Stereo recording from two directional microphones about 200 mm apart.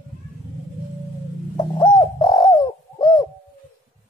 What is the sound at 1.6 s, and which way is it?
Bird, 25° left (ahead or behind).